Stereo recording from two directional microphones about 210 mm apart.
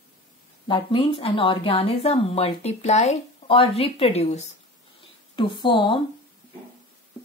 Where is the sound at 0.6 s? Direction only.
25° left (ahead or behind).